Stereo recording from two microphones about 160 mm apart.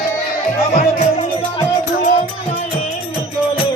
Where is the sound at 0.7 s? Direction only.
45° left (ahead or behind).